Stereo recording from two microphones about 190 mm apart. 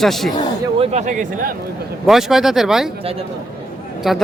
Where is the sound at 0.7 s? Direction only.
35° right (ahead or behind).